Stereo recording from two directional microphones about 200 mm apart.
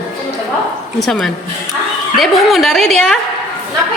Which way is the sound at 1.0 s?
5° left (ahead or behind).